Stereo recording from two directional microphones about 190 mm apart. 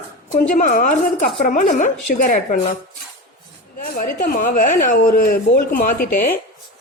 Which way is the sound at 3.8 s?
45° left (ahead or behind).